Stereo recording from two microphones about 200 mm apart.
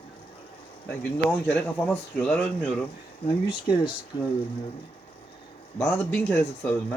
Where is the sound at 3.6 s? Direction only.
25° left (ahead or behind).